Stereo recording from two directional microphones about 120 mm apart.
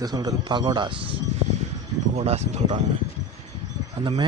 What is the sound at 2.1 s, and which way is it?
Speech, 60° right (ahead or behind).